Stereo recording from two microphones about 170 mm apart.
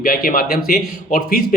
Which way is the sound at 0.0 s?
55° left (ahead or behind).